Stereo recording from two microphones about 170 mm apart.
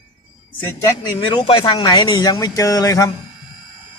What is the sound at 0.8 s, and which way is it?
Speech, 20° left (ahead or behind).